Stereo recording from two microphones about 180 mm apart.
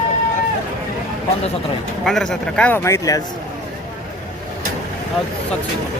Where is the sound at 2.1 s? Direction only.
5° left (ahead or behind).